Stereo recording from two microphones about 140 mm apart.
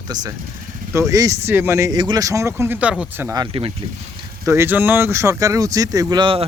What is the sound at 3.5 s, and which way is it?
Speech, 40° right (ahead or behind).